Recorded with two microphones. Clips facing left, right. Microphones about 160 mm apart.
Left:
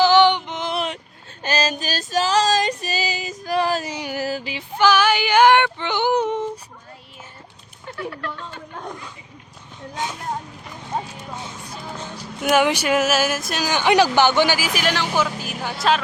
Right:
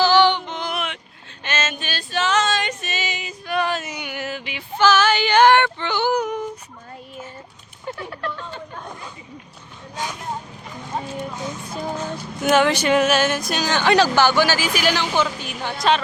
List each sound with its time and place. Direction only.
0.0 s a sound: 20° left (ahead or behind)
1.5 s female singing: 35° left (ahead or behind)
4.8 s female singing: 15° left (ahead or behind)
7.9 s a sound: 30° right (ahead or behind)
10.0 s speech: 20° left (ahead or behind)
12.4 s speech: 5° left (ahead or behind)
14.7 s speech: centre (ahead or behind)